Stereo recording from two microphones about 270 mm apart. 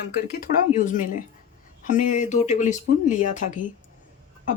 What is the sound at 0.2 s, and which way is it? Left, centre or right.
Speech, left.